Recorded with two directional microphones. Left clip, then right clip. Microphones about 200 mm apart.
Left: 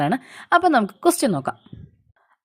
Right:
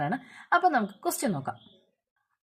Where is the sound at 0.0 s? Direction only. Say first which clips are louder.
Left 9 dB; 45° left (ahead or behind).